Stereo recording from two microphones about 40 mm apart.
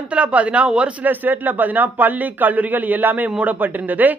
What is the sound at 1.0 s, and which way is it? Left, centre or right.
Speech, right.